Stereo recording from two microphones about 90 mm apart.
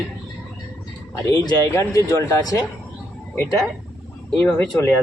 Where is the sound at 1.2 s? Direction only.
40° left (ahead or behind).